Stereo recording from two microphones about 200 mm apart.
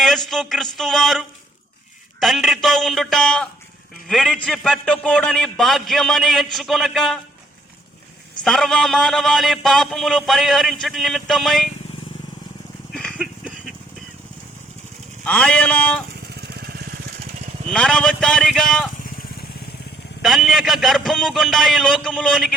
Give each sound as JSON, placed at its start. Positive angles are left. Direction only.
{"t": 0.3, "sound": "a man's voice", "side_deg": 0}
{"t": 8.4, "sound": "a man's voice", "side_deg": 0}
{"t": 12.9, "sound": "goat", "side_deg": 0}
{"t": 15.2, "sound": "a sound", "side_deg": 5}
{"t": 16.4, "sound": "vehicle", "side_deg": -50}
{"t": 17.7, "sound": "a man's voice", "side_deg": 5}
{"t": 20.2, "sound": "a man's voice", "side_deg": 0}